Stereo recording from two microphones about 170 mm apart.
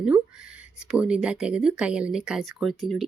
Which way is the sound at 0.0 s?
5° right (ahead or behind).